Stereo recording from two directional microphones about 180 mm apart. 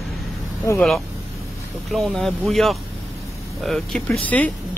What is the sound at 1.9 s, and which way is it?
Speech, centre (ahead or behind).